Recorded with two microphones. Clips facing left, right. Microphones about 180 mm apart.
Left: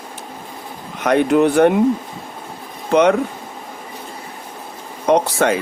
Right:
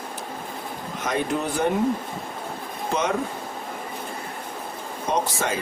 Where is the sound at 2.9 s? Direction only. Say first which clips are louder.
Left 11 dB; 65° left (ahead or behind).